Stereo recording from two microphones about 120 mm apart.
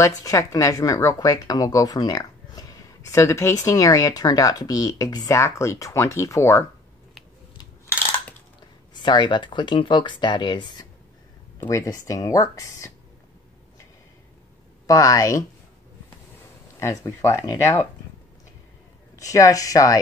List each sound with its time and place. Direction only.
0.0 s speech: 30° left (ahead or behind)
9.0 s speech: 40° left (ahead or behind)
11.6 s speech: 25° left (ahead or behind)
14.9 s speech: 30° left (ahead or behind)
16.8 s speech: 25° left (ahead or behind)
19.1 s speech: 25° left (ahead or behind)